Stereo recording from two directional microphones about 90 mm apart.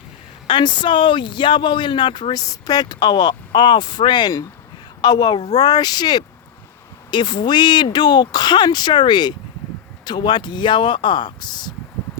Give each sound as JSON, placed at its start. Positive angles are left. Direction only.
{"t": 0.4, "sound": "speech", "side_deg": 60}
{"t": 2.3, "sound": "speech", "side_deg": 45}